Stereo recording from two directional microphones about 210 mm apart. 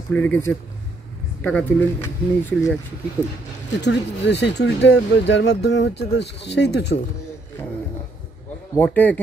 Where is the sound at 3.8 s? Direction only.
55° left (ahead or behind).